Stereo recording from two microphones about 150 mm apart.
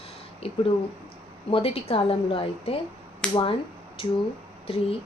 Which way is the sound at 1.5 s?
40° left (ahead or behind).